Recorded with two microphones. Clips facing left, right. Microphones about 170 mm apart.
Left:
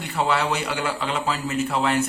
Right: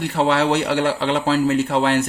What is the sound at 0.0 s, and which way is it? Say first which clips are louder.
A man's voice: right 5 dB; 70° right (ahead or behind).